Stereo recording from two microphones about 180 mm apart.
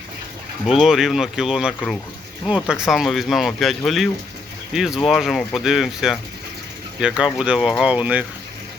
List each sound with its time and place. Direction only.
0.7 s speech: centre (ahead or behind)